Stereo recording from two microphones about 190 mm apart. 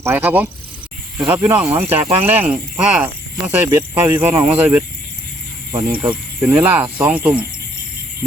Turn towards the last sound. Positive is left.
turn(degrees=-10)  # may be behind; listen again after turning